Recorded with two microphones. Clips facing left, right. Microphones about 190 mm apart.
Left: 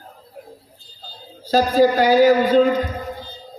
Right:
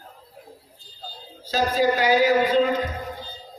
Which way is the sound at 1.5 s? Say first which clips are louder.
Left 6 dB; 40° left (ahead or behind).